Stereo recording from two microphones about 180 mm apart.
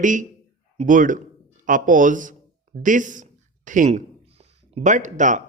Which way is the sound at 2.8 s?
45° right (ahead or behind).